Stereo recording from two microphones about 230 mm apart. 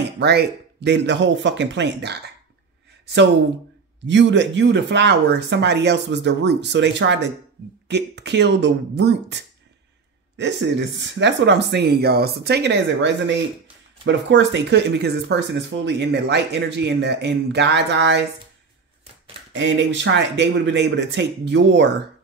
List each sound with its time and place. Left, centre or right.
0.2 s speech: right
4.0 s speech: right
19.5 s speech: right